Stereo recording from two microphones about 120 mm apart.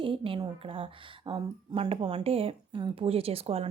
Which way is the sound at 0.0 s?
45° right (ahead or behind).